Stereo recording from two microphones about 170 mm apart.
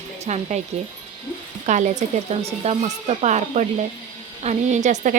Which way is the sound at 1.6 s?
45° right (ahead or behind).